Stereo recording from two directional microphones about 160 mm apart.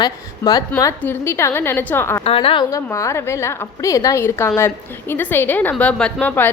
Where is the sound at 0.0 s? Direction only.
25° left (ahead or behind).